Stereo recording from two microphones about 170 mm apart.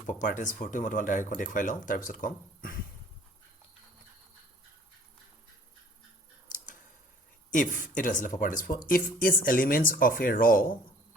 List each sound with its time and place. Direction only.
0.1 s speech: 50° left (ahead or behind)
7.5 s speech: 50° left (ahead or behind)